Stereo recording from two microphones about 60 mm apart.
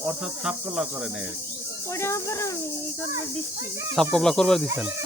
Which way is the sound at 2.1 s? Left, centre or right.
Left.